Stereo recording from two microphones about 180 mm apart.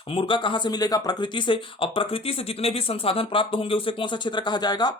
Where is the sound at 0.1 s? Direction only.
30° left (ahead or behind).